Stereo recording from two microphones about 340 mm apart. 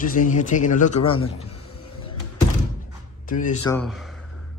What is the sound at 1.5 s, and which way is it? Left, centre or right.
Vehicle, left.